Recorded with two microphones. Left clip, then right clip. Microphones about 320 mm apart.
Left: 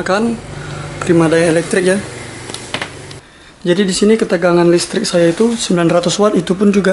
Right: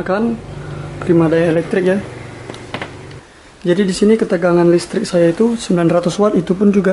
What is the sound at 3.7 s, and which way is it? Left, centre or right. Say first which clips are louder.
Speech: left 1 dB; centre.